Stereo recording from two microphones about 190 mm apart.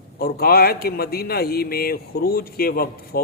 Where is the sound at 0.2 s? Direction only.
55° left (ahead or behind).